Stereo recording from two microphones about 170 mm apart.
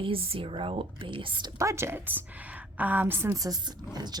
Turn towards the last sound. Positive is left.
turn(degrees=-15)  # may be behind; listen again after turning